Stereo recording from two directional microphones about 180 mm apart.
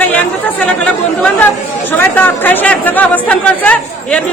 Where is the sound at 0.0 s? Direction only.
10° left (ahead or behind).